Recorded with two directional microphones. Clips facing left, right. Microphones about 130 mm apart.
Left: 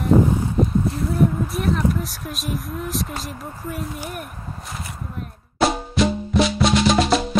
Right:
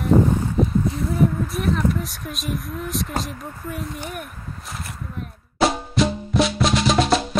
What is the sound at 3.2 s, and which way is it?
Speech, centre (ahead or behind).